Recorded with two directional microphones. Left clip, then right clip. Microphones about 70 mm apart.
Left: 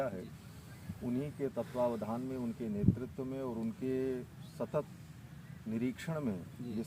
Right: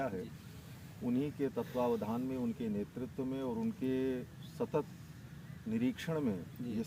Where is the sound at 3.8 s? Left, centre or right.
Left.